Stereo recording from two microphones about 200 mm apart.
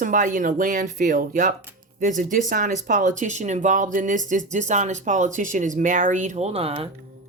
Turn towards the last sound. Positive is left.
turn(degrees=-30)  # may be behind; listen again after turning